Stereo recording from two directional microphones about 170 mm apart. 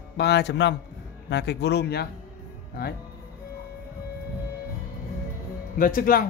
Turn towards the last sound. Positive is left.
turn(degrees=55)  # may be behind; listen again after turning